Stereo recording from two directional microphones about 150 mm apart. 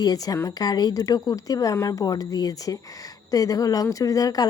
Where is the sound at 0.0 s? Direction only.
25° left (ahead or behind).